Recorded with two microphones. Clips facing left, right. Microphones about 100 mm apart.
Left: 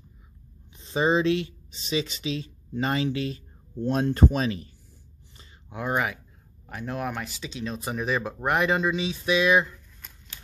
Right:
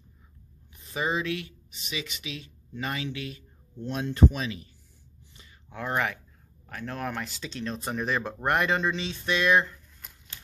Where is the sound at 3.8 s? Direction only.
45° left (ahead or behind).